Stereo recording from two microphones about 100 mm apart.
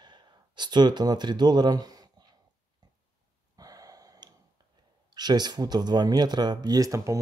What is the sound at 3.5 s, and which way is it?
Gasp, 40° right (ahead or behind).